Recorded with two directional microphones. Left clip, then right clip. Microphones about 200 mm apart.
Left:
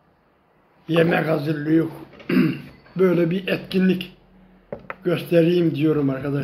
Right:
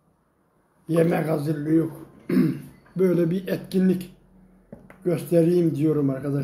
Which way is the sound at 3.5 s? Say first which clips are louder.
Left 3 dB; 15° right (ahead or behind).